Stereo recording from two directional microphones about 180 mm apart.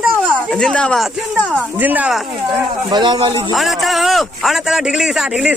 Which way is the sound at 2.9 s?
25° right (ahead or behind).